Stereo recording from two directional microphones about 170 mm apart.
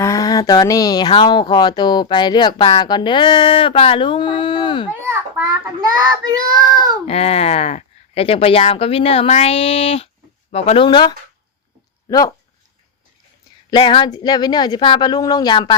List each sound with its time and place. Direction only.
0.0 s speech: 20° left (ahead or behind)
4.9 s a child's voice: 15° right (ahead or behind)
7.0 s speech: 40° left (ahead or behind)
13.7 s speech: 30° left (ahead or behind)